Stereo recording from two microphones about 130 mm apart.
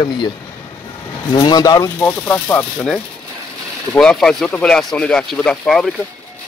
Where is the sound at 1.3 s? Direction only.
35° left (ahead or behind).